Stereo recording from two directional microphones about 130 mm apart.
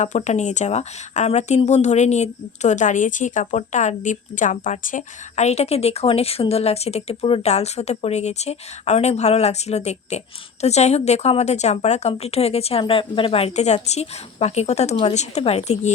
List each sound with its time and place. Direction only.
0.0 s speech: 65° left (ahead or behind)